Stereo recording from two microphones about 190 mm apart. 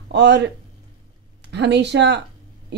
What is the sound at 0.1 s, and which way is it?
Speech, 65° right (ahead or behind).